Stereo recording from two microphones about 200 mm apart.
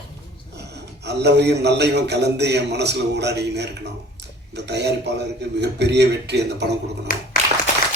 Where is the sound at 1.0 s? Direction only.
55° right (ahead or behind).